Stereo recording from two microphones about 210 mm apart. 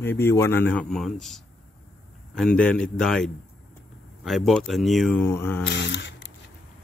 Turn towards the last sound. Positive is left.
turn(degrees=60)  # may be behind; listen again after turning